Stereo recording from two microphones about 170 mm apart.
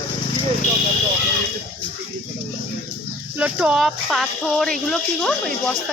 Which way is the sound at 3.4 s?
5° right (ahead or behind).